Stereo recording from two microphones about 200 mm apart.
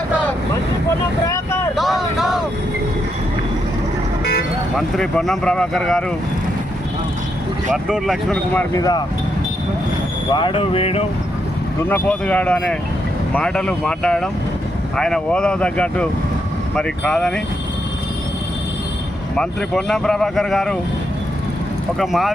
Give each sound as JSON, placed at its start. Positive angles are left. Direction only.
{"t": 1.7, "sound": "vehicle", "side_deg": 0}
{"t": 4.8, "sound": "speech", "side_deg": 0}
{"t": 7.9, "sound": "speech", "side_deg": 0}
{"t": 8.7, "sound": "speech", "side_deg": 20}
{"t": 10.3, "sound": "speech", "side_deg": 25}
{"t": 11.9, "sound": "speech", "side_deg": 10}
{"t": 19.4, "sound": "speech", "side_deg": 5}
{"t": 21.9, "sound": "speech", "side_deg": 0}